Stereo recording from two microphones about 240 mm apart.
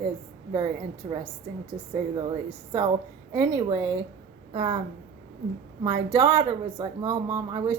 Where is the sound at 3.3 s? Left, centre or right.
Centre.